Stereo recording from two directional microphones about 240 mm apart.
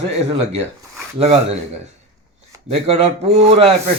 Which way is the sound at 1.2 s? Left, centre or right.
Right.